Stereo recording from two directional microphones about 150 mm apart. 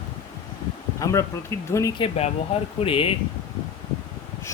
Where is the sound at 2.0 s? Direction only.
40° left (ahead or behind).